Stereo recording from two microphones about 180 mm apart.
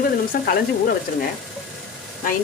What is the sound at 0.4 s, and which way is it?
Frying, 55° left (ahead or behind).